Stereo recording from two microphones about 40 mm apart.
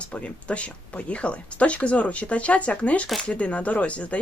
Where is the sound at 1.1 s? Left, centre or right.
Left.